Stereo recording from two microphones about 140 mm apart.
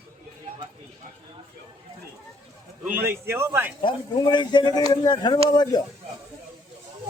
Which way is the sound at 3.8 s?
30° left (ahead or behind).